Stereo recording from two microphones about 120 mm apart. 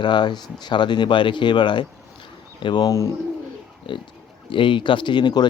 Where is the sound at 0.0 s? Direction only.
40° left (ahead or behind).